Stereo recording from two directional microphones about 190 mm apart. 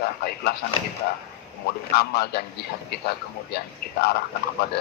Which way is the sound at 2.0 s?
60° left (ahead or behind).